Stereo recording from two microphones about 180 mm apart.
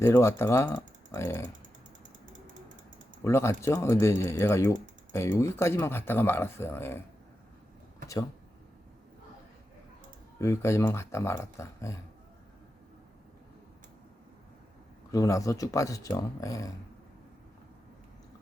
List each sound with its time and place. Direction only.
0.0 s speech: 15° left (ahead or behind)
3.2 s speech: 15° left (ahead or behind)
10.3 s speech: 15° left (ahead or behind)
15.1 s speech: 20° left (ahead or behind)